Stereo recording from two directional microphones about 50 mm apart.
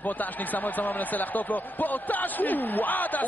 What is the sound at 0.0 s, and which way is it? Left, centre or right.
Speech, left.